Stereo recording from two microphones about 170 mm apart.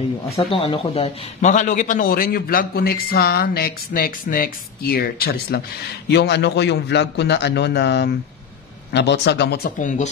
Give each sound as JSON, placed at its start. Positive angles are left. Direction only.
{"t": 0.5, "sound": "a man's voice", "side_deg": 30}
{"t": 6.0, "sound": "a man's voice", "side_deg": 80}
{"t": 9.8, "sound": "speech", "side_deg": 45}